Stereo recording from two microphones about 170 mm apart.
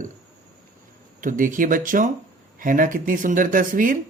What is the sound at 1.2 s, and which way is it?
Speech, 50° right (ahead or behind).